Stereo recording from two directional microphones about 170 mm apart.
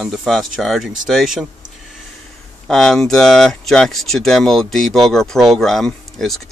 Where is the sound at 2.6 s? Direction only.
5° left (ahead or behind).